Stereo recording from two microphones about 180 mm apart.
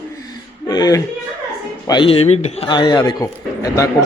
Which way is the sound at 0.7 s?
20° left (ahead or behind).